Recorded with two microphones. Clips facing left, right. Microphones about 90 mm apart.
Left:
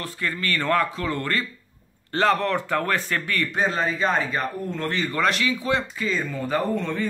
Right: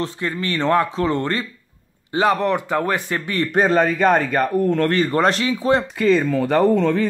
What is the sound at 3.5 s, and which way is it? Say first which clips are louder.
Speech: right 9 dB; 55° right (ahead or behind).